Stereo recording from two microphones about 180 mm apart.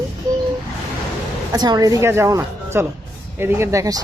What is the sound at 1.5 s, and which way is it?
A woman's voice, 25° right (ahead or behind).